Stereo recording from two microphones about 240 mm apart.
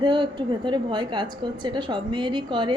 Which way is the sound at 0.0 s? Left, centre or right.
Centre.